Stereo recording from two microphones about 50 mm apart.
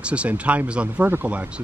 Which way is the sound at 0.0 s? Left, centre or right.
Right.